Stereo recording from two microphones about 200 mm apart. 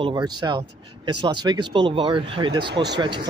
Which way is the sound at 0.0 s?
20° right (ahead or behind).